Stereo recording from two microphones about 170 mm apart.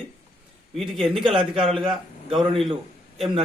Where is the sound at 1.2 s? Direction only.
30° right (ahead or behind).